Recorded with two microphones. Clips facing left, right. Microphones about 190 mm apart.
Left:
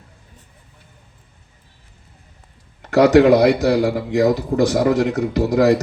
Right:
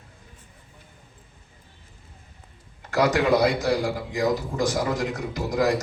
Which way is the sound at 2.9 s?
70° left (ahead or behind).